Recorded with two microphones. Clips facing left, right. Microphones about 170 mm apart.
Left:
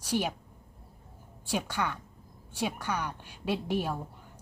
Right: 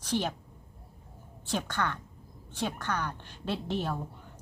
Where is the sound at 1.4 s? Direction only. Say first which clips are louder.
Even; 10° left (ahead or behind).